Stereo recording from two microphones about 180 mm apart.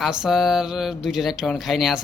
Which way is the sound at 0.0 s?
Centre (ahead or behind).